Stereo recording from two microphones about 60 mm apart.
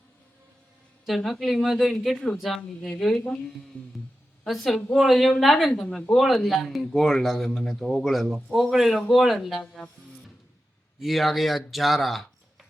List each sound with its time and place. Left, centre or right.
1.0 s speech: centre
3.7 s music: left
4.4 s speech: centre
11.0 s speech: centre